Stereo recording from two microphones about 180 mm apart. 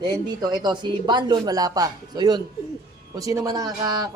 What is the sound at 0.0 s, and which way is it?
Speech, 25° right (ahead or behind).